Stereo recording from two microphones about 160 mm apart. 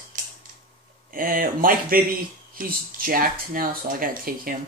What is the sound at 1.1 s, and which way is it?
Speech, 60° right (ahead or behind).